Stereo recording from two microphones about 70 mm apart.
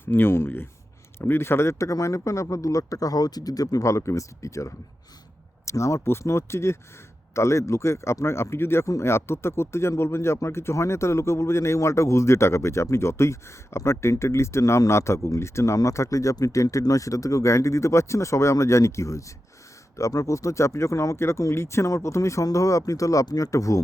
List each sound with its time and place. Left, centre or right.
0.0 s speech: left